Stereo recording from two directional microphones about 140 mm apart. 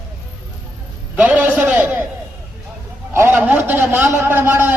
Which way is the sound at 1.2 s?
10° right (ahead or behind).